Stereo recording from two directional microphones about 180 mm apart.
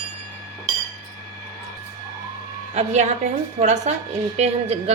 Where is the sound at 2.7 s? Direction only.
40° right (ahead or behind).